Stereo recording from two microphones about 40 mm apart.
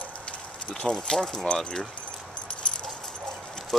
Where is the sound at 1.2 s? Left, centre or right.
Centre.